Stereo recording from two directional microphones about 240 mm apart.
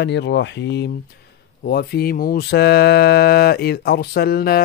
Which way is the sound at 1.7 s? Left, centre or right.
Left.